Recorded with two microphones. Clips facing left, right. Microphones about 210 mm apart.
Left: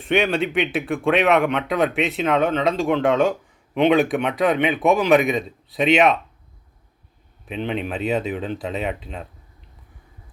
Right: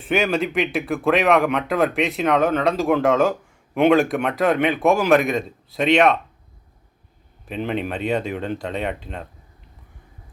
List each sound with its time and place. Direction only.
0.0 s speech: centre (ahead or behind)
7.4 s speech: centre (ahead or behind)